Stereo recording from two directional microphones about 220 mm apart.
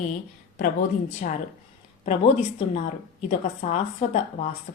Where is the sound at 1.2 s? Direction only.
35° left (ahead or behind).